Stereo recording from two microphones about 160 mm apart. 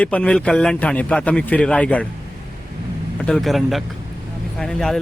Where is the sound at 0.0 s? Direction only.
10° left (ahead or behind).